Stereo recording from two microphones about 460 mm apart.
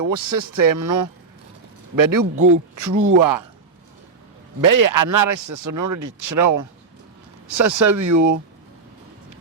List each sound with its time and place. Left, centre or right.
0.3 s speech: right
4.6 s speech: right